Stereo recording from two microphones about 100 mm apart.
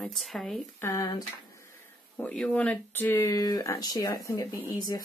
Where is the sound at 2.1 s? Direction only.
10° left (ahead or behind).